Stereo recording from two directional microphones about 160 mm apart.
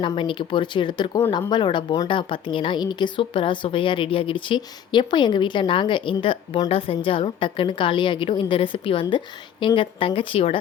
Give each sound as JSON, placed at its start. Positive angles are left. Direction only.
{"t": 0.0, "sound": "a woman's voice", "side_deg": 30}